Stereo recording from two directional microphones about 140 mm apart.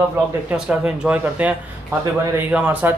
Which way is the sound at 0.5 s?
5° right (ahead or behind).